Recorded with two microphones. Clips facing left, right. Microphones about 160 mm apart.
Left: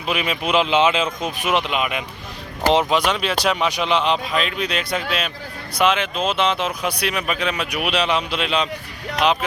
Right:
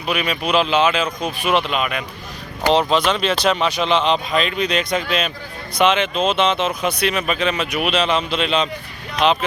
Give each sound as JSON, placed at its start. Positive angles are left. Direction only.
{"t": 0.0, "sound": "speech", "side_deg": 20}